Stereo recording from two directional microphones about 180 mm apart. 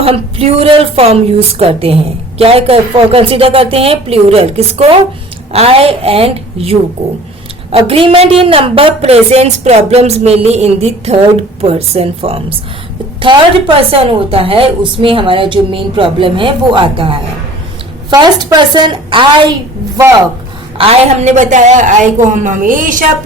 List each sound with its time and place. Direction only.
0.0 s a woman's voice: 30° right (ahead or behind)
20.7 s a woman's voice: 35° right (ahead or behind)